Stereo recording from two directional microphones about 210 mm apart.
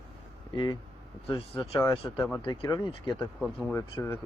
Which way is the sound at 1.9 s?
25° left (ahead or behind).